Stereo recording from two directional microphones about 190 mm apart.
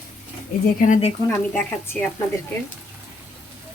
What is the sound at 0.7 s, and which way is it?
Speech, 45° left (ahead or behind).